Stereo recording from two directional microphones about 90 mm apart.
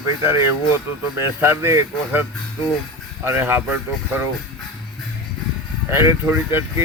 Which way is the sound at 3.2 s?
25° right (ahead or behind).